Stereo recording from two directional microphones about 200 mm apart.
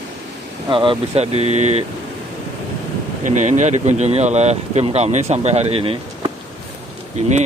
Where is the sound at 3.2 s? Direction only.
35° right (ahead or behind).